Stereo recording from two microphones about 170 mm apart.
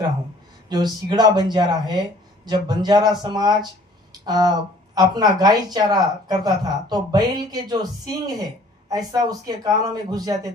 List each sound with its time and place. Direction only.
0.7 s speech: 25° right (ahead or behind)